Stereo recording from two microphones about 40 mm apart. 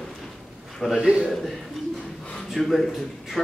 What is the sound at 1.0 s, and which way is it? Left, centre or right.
Speech, right.